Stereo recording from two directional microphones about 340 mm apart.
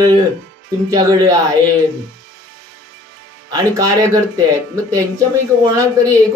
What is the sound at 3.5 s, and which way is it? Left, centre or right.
Speech, centre.